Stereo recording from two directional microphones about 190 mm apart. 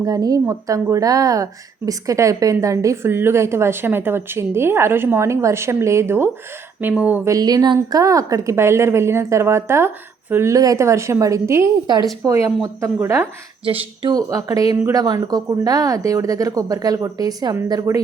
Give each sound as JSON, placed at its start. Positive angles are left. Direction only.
{"t": 0.0, "sound": "speech", "side_deg": -20}
{"t": 13.7, "sound": "speech", "side_deg": -30}